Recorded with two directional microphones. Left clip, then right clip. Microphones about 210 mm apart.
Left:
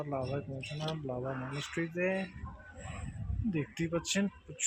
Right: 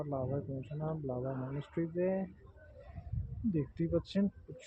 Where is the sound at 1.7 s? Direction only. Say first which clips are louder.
Left 1 dB; 5° left (ahead or behind).